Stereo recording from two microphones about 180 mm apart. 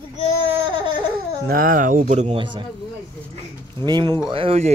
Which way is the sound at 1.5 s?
50° right (ahead or behind).